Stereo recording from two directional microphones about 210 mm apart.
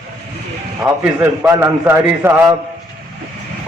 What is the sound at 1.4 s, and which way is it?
A man's voice, 10° right (ahead or behind).